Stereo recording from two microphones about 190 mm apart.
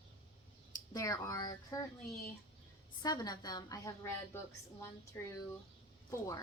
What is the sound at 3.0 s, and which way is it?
A woman's voice, 20° left (ahead or behind).